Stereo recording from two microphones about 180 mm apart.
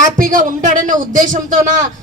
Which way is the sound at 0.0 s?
45° right (ahead or behind).